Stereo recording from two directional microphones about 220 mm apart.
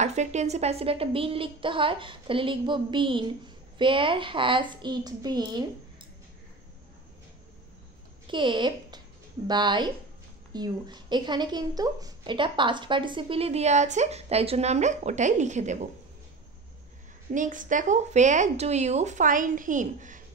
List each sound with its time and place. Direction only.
0.0 s a woman's voice: 30° right (ahead or behind)
8.3 s a woman's voice: 20° right (ahead or behind)
17.3 s a woman's voice: 35° right (ahead or behind)